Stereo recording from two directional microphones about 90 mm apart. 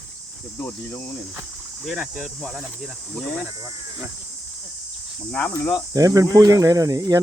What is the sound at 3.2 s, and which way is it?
Speech, 15° left (ahead or behind).